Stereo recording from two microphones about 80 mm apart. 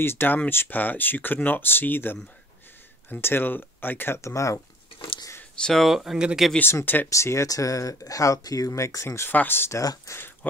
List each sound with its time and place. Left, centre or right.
0.0 s speech: left
5.4 s speech: centre
6.6 s speech: left
7.1 s speech: left
9.3 s speech: left
9.8 s speech: left